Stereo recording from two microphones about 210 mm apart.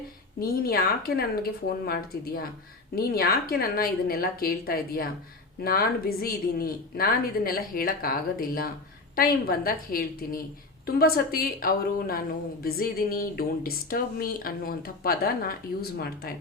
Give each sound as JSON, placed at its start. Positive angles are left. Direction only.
{"t": 0.3, "sound": "speech", "side_deg": 45}